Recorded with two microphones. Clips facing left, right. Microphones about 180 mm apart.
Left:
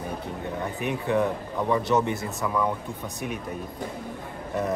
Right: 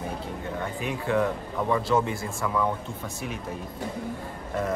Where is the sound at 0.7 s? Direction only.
20° left (ahead or behind).